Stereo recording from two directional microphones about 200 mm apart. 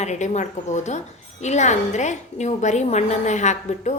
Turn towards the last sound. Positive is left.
turn(degrees=35)  # may be behind; listen again after turning